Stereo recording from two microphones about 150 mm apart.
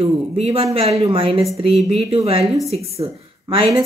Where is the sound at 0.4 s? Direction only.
40° right (ahead or behind).